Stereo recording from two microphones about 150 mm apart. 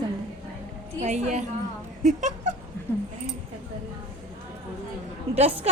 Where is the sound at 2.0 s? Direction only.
55° right (ahead or behind).